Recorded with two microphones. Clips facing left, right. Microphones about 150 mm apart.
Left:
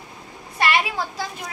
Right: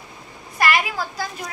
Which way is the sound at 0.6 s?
25° left (ahead or behind).